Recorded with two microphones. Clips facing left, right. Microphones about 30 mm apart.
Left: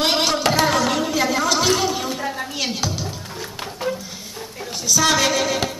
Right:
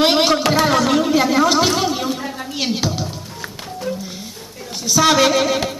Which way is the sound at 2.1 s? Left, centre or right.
Centre.